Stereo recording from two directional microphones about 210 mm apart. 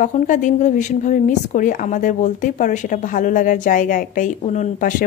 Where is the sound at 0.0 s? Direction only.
35° left (ahead or behind).